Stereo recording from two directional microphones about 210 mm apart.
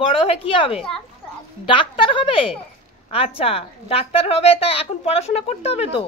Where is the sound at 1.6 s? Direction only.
25° left (ahead or behind).